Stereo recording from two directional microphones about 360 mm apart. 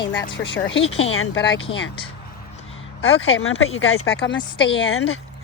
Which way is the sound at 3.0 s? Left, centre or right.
Left.